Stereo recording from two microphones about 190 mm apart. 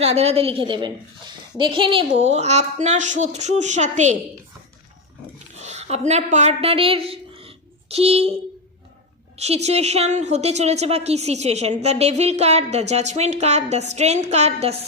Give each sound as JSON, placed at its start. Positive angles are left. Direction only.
{"t": 0.0, "sound": "a woman's voice", "side_deg": -35}
{"t": 5.5, "sound": "a sound", "side_deg": -35}
{"t": 6.1, "sound": "speech", "side_deg": -35}
{"t": 9.4, "sound": "a woman's voice", "side_deg": -35}